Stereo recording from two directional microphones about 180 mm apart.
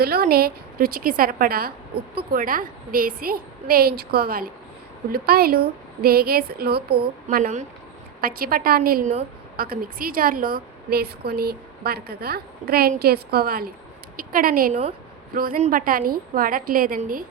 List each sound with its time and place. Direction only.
0.0 s a woman's voice: 60° right (ahead or behind)